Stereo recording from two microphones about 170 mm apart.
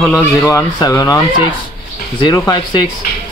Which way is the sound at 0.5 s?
20° left (ahead or behind).